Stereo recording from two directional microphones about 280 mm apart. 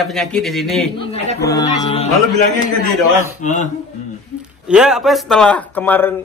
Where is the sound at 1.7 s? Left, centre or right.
Left.